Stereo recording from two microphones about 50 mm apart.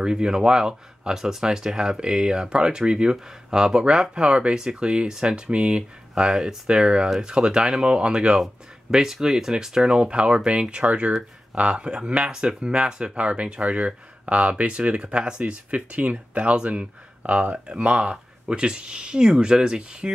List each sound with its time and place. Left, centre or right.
0.0 s speech: centre
6.2 s speech: centre
10.0 s speech: right